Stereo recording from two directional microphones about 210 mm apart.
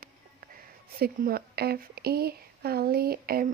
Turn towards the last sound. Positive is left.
turn(degrees=-45)  # may be behind; listen again after turning